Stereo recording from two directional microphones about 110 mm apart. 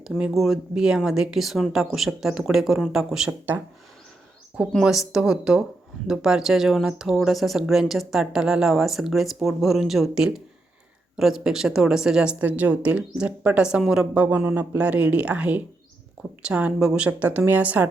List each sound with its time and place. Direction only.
0.0 s speech: centre (ahead or behind)
4.7 s a woman's voice: 5° right (ahead or behind)